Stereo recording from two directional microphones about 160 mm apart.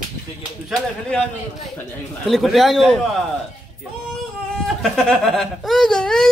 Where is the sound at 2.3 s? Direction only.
Centre (ahead or behind).